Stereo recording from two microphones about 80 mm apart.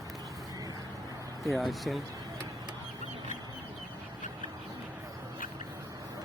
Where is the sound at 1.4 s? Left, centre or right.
Centre.